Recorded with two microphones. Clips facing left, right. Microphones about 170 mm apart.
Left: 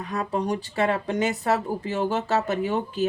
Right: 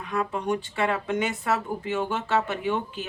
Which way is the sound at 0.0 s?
40° left (ahead or behind).